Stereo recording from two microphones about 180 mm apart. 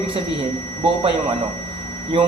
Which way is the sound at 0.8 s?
25° right (ahead or behind).